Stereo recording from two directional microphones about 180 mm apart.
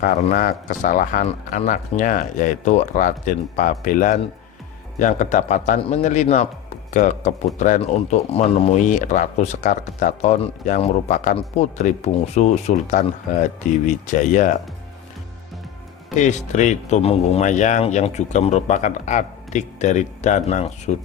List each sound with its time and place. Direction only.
0.0 s a man's voice: 50° left (ahead or behind); by 8.4 s 35° left (ahead or behind)
8.9 s speech: 45° left (ahead or behind)
16.1 s speech: 40° left (ahead or behind)